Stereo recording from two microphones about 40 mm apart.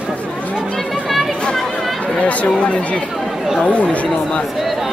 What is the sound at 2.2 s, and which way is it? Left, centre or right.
Speech, left.